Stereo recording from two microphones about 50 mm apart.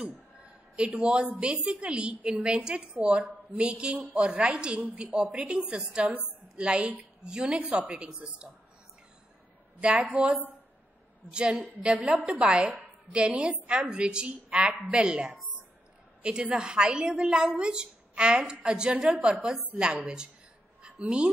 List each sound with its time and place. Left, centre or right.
0.0 s a sound: right
1.4 s a woman's voice: centre
9.8 s a woman's voice: right
10.1 s a woman's voice: centre
11.3 s a woman's voice: centre
20.8 s a sound: centre